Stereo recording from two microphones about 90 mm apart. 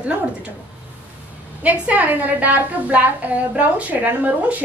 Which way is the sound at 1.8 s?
15° right (ahead or behind).